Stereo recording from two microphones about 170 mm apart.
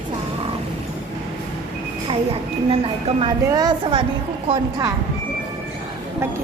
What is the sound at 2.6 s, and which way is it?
Speech, 35° right (ahead or behind).